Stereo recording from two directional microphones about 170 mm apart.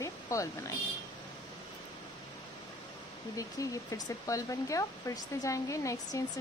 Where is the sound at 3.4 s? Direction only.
20° left (ahead or behind).